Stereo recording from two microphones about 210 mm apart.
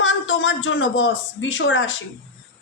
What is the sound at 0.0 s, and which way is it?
A woman's voice, 65° left (ahead or behind).